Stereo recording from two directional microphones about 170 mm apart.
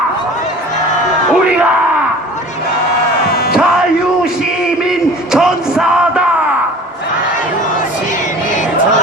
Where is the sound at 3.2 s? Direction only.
65° left (ahead or behind).